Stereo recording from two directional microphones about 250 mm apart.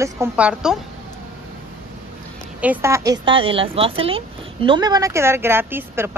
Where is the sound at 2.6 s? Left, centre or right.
Centre.